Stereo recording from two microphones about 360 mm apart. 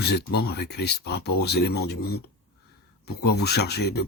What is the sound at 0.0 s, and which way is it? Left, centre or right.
Speech, left.